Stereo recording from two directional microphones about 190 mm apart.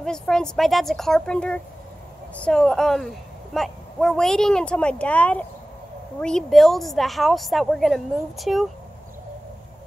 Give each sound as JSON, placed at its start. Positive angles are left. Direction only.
{"t": 0.0, "sound": "speech", "side_deg": 5}